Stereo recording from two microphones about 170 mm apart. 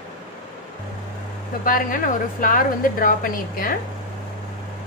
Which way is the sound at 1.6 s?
55° left (ahead or behind).